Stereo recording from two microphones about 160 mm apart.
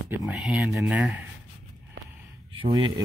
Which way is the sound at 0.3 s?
5° right (ahead or behind).